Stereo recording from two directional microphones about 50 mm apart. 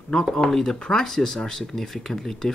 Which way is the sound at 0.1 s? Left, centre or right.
Centre.